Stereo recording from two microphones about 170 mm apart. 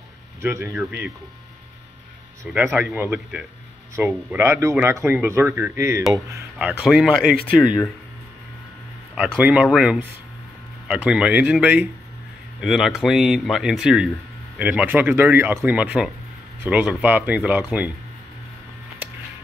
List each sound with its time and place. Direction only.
0.4 s speech: 15° right (ahead or behind)
2.4 s speech: 10° right (ahead or behind)
6.8 s speech: centre (ahead or behind)
9.1 s speech: 5° right (ahead or behind)
19.0 s music: 10° right (ahead or behind)